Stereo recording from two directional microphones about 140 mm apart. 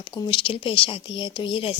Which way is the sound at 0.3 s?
40° left (ahead or behind).